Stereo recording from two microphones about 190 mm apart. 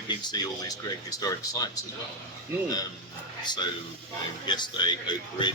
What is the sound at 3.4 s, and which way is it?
Speech, 25° left (ahead or behind).